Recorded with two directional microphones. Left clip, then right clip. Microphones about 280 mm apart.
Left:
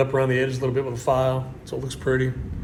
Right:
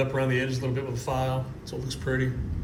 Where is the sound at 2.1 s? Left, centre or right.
Left.